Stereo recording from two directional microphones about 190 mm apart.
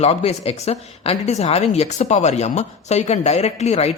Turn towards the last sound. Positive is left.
turn(degrees=35)  # may be behind; listen again after turning